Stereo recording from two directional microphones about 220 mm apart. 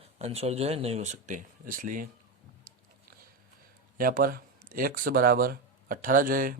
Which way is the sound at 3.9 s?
40° right (ahead or behind).